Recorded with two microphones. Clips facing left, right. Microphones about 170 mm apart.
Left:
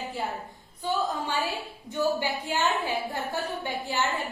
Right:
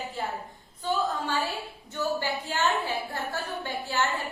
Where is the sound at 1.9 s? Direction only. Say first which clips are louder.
Left 2 dB; 15° left (ahead or behind).